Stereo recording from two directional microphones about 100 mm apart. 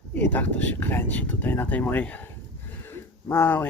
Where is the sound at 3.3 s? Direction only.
25° left (ahead or behind).